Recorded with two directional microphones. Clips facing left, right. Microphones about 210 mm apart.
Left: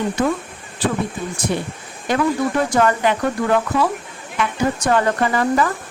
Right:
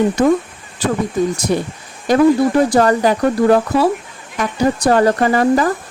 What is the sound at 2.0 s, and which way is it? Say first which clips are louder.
A woman's voice: right 7 dB; 40° right (ahead or behind).